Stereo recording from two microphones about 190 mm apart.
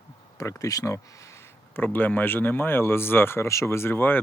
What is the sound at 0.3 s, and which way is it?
Speech, 15° left (ahead or behind).